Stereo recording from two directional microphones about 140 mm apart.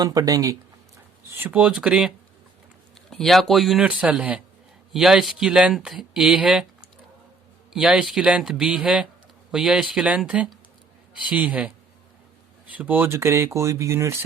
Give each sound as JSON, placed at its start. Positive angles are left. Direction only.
{"t": 0.0, "sound": "speech", "side_deg": -25}
{"t": 1.3, "sound": "speech", "side_deg": -15}
{"t": 7.7, "sound": "speech", "side_deg": -5}
{"t": 12.7, "sound": "speech", "side_deg": -10}